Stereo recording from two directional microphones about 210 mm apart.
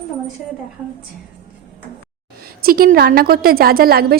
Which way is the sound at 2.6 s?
45° right (ahead or behind).